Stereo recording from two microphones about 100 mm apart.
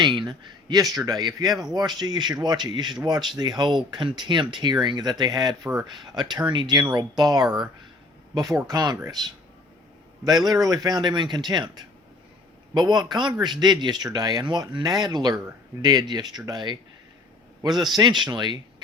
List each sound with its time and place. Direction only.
0.0 s speech: 50° right (ahead or behind)
1.5 s speech: centre (ahead or behind)
1.7 s speech: 45° right (ahead or behind)
7.4 s speech: 5° right (ahead or behind)
8.4 s a man's voice: 35° right (ahead or behind)